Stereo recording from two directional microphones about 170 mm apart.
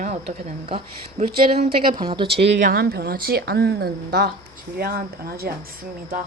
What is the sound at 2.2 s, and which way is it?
Speech, 80° right.